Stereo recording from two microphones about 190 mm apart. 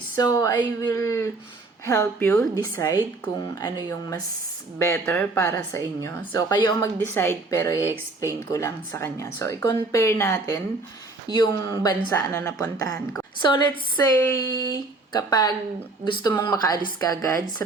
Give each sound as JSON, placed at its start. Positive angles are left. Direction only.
{"t": 0.2, "sound": "a woman's voice", "side_deg": 20}
{"t": 15.3, "sound": "a woman's voice", "side_deg": 20}